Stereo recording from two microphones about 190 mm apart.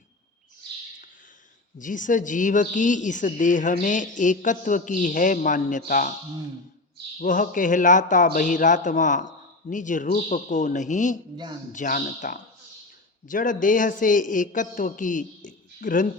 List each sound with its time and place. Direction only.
1.8 s a woman's voice: 45° left (ahead or behind)
7.2 s a woman's voice: 45° left (ahead or behind)
15.4 s a sound: 45° left (ahead or behind)